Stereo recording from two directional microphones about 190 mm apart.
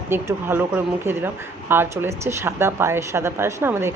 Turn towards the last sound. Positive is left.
turn(degrees=-10)  # may be behind; listen again after turning